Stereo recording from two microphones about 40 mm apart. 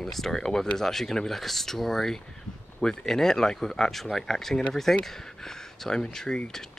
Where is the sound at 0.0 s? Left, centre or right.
Centre.